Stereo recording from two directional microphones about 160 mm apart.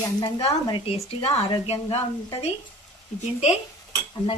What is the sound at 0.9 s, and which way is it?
A woman's voice, 40° left (ahead or behind).